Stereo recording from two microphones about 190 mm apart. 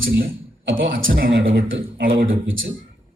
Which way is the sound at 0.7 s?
85° right.